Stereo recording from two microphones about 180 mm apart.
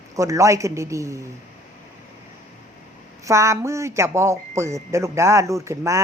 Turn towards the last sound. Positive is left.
turn(degrees=-15)  # may be behind; listen again after turning